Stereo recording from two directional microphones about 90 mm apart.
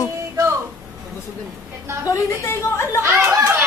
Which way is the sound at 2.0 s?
30° left (ahead or behind).